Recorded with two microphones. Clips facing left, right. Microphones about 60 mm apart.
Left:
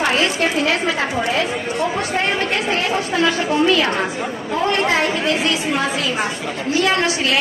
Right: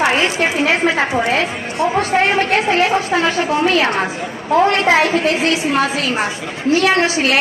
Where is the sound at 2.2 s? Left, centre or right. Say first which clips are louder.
Right 4 dB; right.